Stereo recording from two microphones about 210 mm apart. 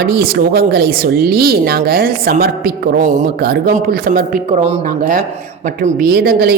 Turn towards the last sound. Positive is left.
turn(degrees=-50)  # may be behind; listen again after turning